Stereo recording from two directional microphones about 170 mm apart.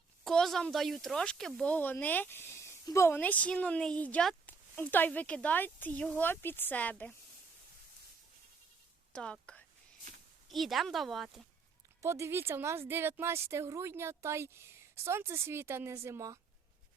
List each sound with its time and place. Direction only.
0.3 s speech: centre (ahead or behind)
9.1 s speech: 5° left (ahead or behind)
12.0 s speech: 15° right (ahead or behind)